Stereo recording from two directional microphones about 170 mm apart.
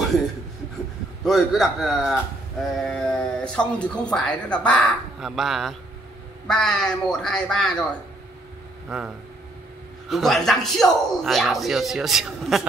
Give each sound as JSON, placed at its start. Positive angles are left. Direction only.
{"t": 1.2, "sound": "speech", "side_deg": 0}
{"t": 8.8, "sound": "speech", "side_deg": -5}